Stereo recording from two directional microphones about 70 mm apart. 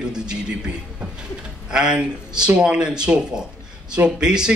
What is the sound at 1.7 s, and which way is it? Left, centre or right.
A man's voice, centre.